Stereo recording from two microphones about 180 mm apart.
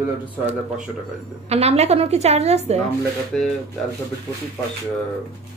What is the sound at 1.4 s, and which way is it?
A woman's voice, 35° right (ahead or behind).